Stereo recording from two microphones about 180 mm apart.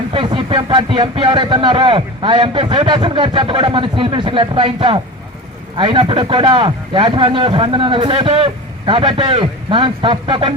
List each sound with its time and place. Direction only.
0.1 s speech: 30° right (ahead or behind)